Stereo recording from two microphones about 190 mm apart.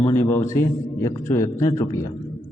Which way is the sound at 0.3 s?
15° left (ahead or behind).